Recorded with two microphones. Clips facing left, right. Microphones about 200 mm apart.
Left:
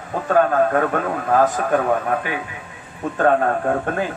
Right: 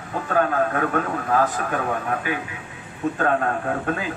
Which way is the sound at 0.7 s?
45° left (ahead or behind).